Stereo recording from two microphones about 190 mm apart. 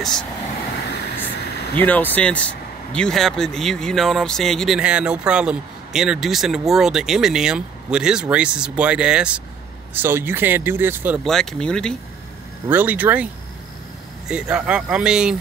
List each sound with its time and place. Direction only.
0.0 s speech: 5° left (ahead or behind)
1.3 s a sound: 60° left (ahead or behind)
1.8 s speech: 10° left (ahead or behind); by 11.1 s 10° right (ahead or behind)
11.2 s speech: centre (ahead or behind)
12.6 s speech: 10° right (ahead or behind)